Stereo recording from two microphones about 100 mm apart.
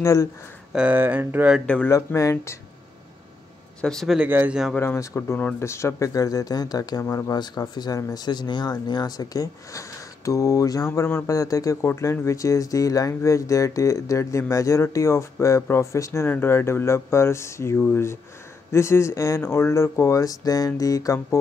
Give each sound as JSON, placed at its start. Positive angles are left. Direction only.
{"t": 0.0, "sound": "speech", "side_deg": 30}
{"t": 0.7, "sound": "speech", "side_deg": -15}
{"t": 1.9, "sound": "speech", "side_deg": 30}
{"t": 3.8, "sound": "speech", "side_deg": 5}
{"t": 4.7, "sound": "speech", "side_deg": 25}
{"t": 7.3, "sound": "speech", "side_deg": 45}
{"t": 10.9, "sound": "speech", "side_deg": 20}